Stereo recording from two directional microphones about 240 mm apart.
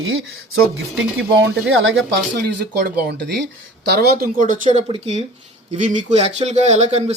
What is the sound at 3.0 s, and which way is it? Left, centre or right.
Speech, right.